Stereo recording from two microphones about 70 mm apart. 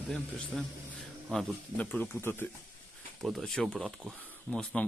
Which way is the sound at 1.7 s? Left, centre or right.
Left.